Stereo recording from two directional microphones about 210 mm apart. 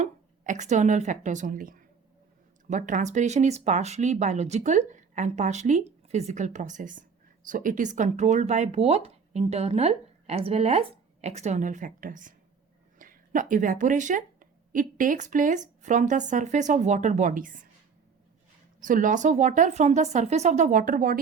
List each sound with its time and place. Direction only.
0.0 s a woman's voice: 35° right (ahead or behind)
18.8 s speech: 40° right (ahead or behind)